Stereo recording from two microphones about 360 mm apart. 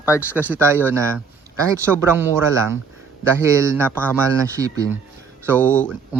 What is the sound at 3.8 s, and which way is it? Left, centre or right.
Speech, centre.